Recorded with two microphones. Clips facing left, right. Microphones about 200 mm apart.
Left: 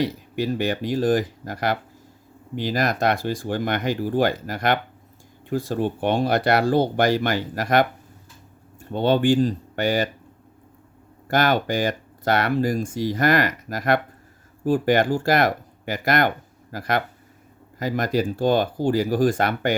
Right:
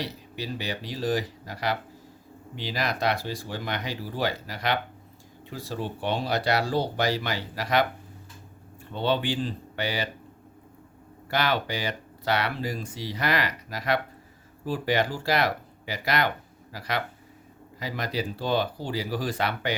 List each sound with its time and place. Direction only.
0.0 s speech: 50° left (ahead or behind)
11.3 s speech: 45° left (ahead or behind)